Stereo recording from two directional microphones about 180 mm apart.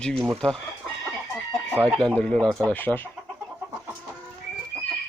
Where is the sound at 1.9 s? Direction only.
5° left (ahead or behind).